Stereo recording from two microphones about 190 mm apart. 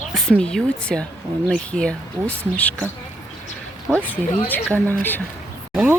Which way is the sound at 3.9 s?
Centre (ahead or behind).